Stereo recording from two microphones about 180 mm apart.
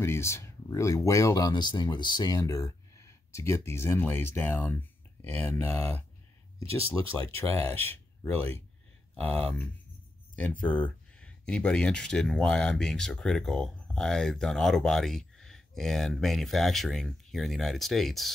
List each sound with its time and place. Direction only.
0.0 s speech: 15° left (ahead or behind)
7.2 s speech: 10° left (ahead or behind)